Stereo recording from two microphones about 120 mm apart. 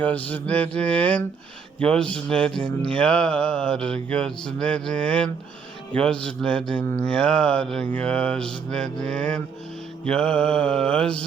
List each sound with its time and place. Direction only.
0.0 s mantra: 10° left (ahead or behind)